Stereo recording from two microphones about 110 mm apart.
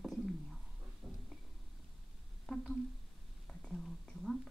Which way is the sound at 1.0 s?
20° right (ahead or behind).